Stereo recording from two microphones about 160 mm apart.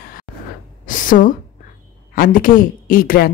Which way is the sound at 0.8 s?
55° left (ahead or behind).